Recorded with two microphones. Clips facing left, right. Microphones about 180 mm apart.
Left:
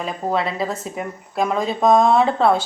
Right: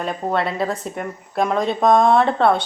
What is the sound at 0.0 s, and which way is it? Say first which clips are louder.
Speech: right 1 dB; centre (ahead or behind).